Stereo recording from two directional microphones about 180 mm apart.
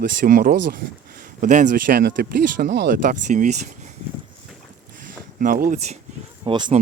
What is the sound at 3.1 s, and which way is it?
Speech, 45° right (ahead or behind).